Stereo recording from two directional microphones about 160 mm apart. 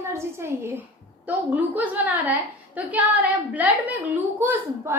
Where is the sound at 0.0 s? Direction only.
15° right (ahead or behind).